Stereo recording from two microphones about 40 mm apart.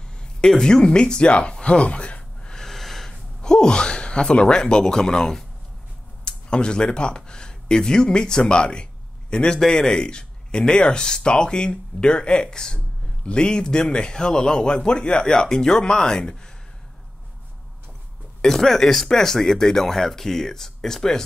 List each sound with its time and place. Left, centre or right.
0.0 s a sound: left
0.6 s speech: centre
2.5 s snort: centre
3.4 s speech: left
18.4 s speech: centre